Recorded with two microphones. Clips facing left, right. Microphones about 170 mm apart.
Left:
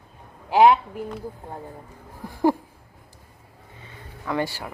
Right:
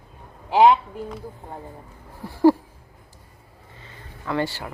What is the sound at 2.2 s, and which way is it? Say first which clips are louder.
Speech: right 5 dB; 15° left (ahead or behind).